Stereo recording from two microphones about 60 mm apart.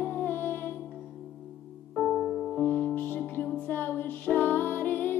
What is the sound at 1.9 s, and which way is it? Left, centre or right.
Music, centre.